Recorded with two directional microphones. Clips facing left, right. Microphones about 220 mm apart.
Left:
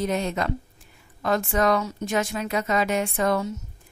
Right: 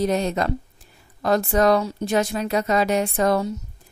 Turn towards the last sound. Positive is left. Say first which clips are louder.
# right 3 dB
turn(degrees=-35)  # may be behind; listen again after turning